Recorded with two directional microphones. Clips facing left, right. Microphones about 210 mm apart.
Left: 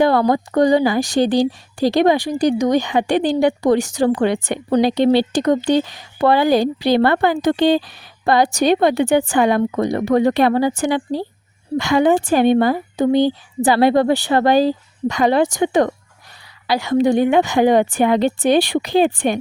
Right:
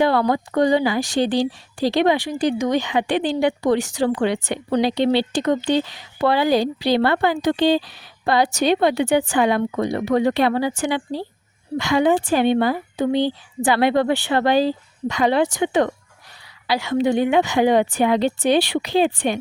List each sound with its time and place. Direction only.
0.0 s speech: 45° left (ahead or behind)